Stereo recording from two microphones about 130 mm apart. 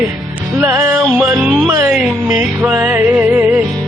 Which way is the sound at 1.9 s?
5° right (ahead or behind).